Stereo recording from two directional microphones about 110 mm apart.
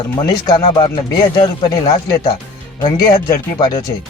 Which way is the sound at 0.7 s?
40° left (ahead or behind).